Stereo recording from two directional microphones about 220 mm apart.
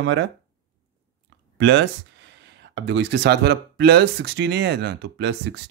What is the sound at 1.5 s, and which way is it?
Speech, 55° right (ahead or behind).